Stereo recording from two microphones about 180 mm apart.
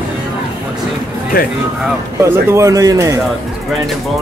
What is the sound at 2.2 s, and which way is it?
Speech, 15° right (ahead or behind).